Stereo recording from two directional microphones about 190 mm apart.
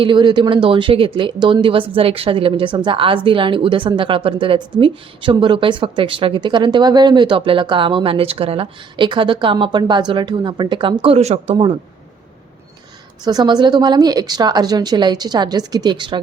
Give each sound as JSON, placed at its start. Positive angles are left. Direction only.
{"t": 0.0, "sound": "speech", "side_deg": -25}
{"t": 13.2, "sound": "speech", "side_deg": -20}